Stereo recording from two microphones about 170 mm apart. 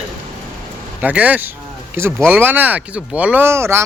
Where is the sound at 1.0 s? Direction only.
10° right (ahead or behind).